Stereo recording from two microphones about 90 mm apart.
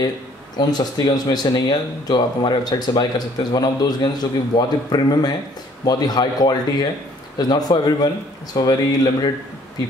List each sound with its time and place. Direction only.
0.6 s speech: 50° left (ahead or behind)